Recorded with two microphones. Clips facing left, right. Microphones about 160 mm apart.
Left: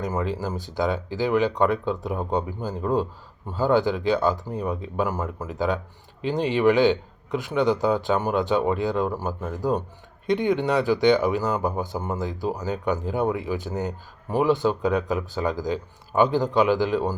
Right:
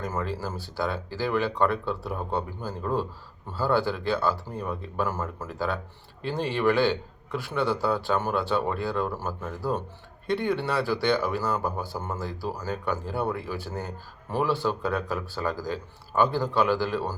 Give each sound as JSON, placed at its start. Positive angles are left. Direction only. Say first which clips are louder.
{"t": 0.0, "sound": "speech", "louder": "left 4 dB", "side_deg": 15}